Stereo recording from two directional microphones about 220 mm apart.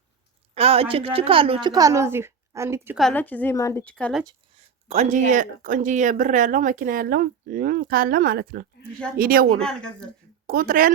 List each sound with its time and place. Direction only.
0.5 s a woman's voice: 25° right (ahead or behind); by 3.0 s 10° right (ahead or behind)
3.0 s a woman's voice: 5° left (ahead or behind)
4.3 s speech: 25° right (ahead or behind)
9.6 s speech: 5° left (ahead or behind)
10.4 s speech: 40° right (ahead or behind)